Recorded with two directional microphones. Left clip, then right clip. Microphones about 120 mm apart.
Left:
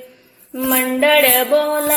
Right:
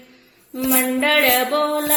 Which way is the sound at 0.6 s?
35° left (ahead or behind).